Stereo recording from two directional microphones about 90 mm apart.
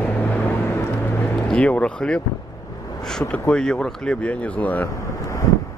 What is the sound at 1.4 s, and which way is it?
Speech, 10° left (ahead or behind).